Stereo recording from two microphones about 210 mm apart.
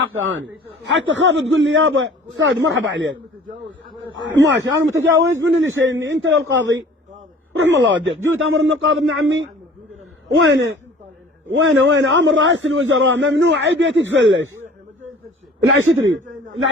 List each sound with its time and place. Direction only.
0.2 s a man's voice: 65° right (ahead or behind)
8.3 s a man's voice: 70° right (ahead or behind)
10.3 s a man's voice: 55° right (ahead or behind)
15.6 s a man's voice: 70° right (ahead or behind)